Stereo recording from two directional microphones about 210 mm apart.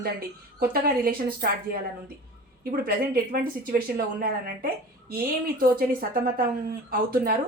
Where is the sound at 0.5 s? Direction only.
45° right (ahead or behind).